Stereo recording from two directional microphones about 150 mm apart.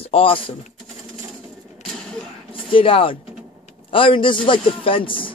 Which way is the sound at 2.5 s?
35° left (ahead or behind).